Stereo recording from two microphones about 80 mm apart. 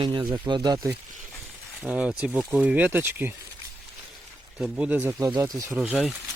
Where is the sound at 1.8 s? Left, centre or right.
Centre.